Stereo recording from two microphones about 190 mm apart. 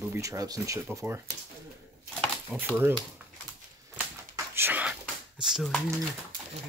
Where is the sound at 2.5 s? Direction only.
5° right (ahead or behind).